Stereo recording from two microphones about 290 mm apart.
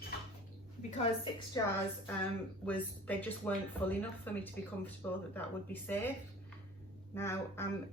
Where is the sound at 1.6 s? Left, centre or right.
Centre.